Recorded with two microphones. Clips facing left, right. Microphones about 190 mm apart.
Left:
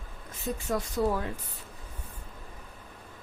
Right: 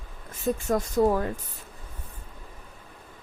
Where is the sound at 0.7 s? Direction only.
45° right (ahead or behind).